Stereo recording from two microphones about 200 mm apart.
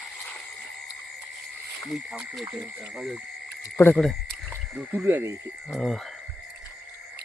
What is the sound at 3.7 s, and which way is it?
Speech, 10° left (ahead or behind).